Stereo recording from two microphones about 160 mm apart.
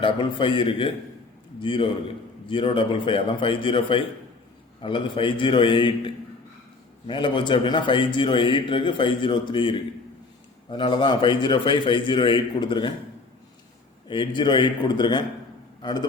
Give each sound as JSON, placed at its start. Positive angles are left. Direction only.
{"t": 0.0, "sound": "a man's voice", "side_deg": 30}
{"t": 14.1, "sound": "a man's voice", "side_deg": 30}